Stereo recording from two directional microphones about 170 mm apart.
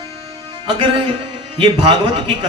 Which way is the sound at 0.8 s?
30° right (ahead or behind).